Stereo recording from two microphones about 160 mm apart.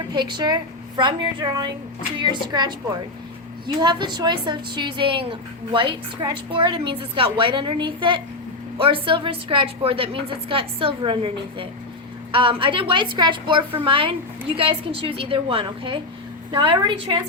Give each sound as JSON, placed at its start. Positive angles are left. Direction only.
{"t": 0.1, "sound": "a woman's voice", "side_deg": -30}